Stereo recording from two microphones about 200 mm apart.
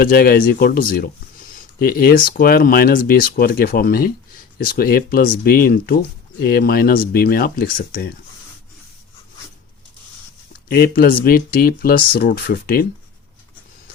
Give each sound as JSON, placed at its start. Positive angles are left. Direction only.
{"t": 0.0, "sound": "speech", "side_deg": 45}
{"t": 10.7, "sound": "speech", "side_deg": 50}